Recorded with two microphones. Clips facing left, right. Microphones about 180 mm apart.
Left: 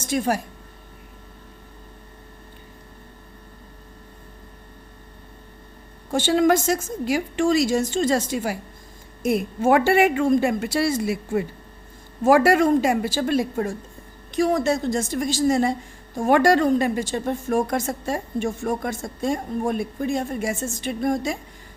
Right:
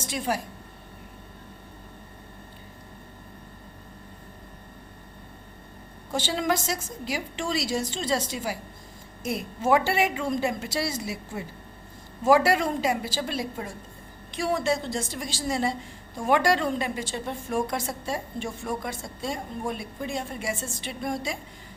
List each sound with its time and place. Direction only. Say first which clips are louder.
0.0 s speech: left 6 dB; 45° left (ahead or behind)
6.1 s a woman's voice: left 8 dB; 50° left (ahead or behind)